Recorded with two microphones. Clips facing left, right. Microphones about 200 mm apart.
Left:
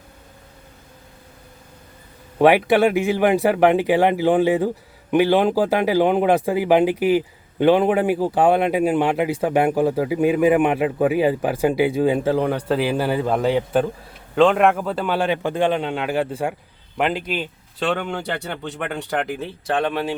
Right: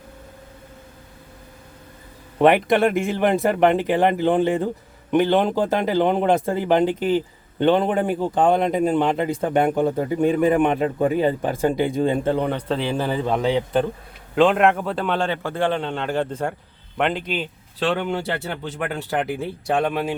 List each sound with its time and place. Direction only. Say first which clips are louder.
2.4 s speech: left 1 dB; 5° left (ahead or behind)